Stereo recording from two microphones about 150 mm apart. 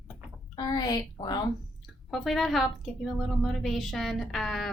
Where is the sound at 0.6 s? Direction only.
30° left (ahead or behind).